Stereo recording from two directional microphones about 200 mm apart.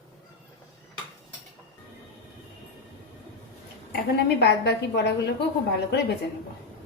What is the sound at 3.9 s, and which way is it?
Speech, 55° left (ahead or behind).